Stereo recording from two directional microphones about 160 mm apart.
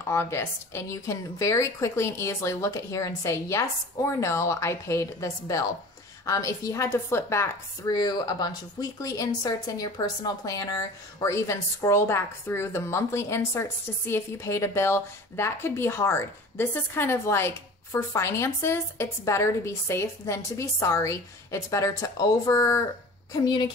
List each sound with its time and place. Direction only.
0.0 s a woman's voice: 15° left (ahead or behind)